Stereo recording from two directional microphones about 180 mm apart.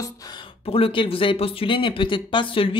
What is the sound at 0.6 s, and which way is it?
Speech, 30° left (ahead or behind).